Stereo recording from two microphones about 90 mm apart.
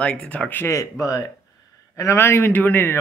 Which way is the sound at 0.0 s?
15° left (ahead or behind).